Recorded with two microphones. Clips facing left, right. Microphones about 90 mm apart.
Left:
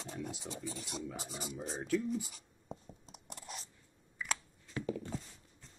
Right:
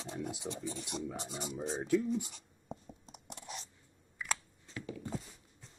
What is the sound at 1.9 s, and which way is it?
Writing, centre (ahead or behind).